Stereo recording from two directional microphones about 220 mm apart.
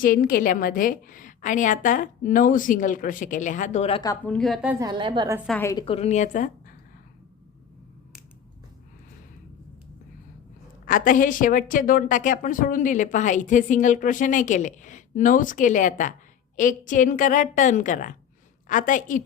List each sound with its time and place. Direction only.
0.0 s a woman's voice: 40° left (ahead or behind)
4.0 s speech: 15° left (ahead or behind)
4.4 s a woman's voice: centre (ahead or behind)
4.8 s a woman's voice: 20° right (ahead or behind)
5.5 s speech: 10° left (ahead or behind)
5.7 s a woman's voice: 25° left (ahead or behind)
10.8 s a woman's voice: 40° left (ahead or behind)